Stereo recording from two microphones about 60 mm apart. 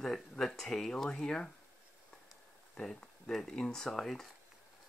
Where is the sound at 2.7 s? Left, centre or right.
Centre.